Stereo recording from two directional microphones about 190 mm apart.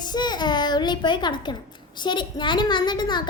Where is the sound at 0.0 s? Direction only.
25° left (ahead or behind).